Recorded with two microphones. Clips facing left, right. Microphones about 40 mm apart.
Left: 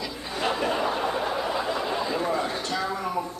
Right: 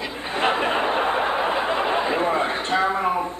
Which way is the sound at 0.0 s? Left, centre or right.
Right.